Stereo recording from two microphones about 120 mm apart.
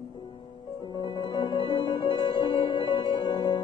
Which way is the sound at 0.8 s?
40° left (ahead or behind).